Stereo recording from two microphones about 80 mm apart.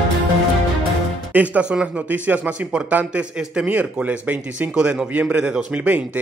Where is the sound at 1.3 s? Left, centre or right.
Centre.